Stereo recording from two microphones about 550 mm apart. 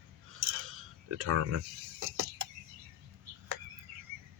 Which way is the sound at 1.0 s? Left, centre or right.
Right.